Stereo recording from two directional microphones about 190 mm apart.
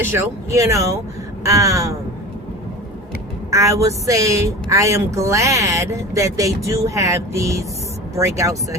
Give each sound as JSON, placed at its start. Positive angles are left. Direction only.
{"t": 0.0, "sound": "a woman's voice", "side_deg": -10}
{"t": 3.5, "sound": "a woman's voice", "side_deg": -15}